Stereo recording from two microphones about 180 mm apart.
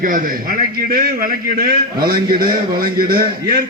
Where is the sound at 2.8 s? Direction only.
55° right (ahead or behind).